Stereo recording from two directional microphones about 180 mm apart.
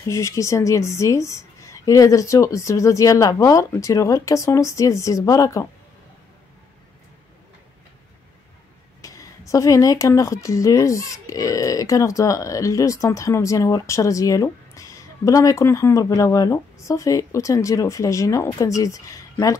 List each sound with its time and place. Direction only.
0.1 s speech: 15° left (ahead or behind)
9.0 s a sound: 15° left (ahead or behind)
9.5 s speech: 15° left (ahead or behind)